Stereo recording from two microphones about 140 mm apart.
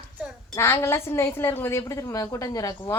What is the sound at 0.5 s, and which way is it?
A woman's voice, 20° left (ahead or behind).